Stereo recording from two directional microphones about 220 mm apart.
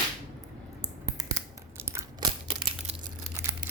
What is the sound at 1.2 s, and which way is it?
Scissors, 15° right (ahead or behind).